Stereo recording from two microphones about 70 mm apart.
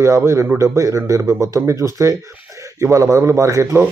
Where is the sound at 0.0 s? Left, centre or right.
Right.